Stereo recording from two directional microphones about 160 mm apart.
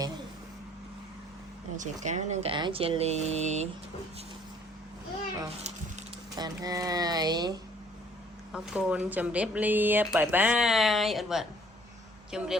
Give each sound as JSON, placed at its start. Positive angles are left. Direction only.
{"t": 1.7, "sound": "speech", "side_deg": -50}
{"t": 2.5, "sound": "speech", "side_deg": -30}
{"t": 6.3, "sound": "speech", "side_deg": -25}
{"t": 8.5, "sound": "speech", "side_deg": -5}